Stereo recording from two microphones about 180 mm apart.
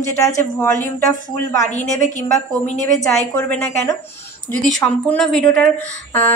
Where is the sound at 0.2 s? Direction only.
15° left (ahead or behind).